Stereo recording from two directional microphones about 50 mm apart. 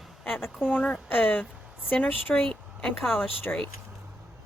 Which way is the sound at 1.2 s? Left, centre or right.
Left.